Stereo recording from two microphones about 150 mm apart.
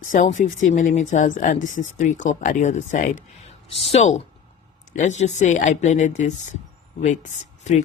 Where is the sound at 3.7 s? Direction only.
45° left (ahead or behind).